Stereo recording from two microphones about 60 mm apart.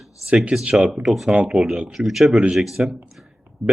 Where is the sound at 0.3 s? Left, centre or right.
Centre.